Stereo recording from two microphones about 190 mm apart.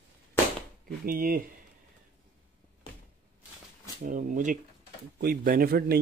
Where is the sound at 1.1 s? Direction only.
50° right (ahead or behind).